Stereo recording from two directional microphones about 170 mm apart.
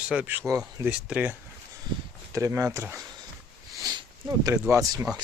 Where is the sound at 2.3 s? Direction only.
20° right (ahead or behind).